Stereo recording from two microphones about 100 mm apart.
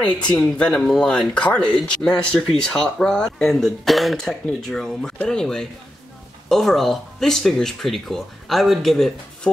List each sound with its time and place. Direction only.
0.0 s speech: 10° left (ahead or behind)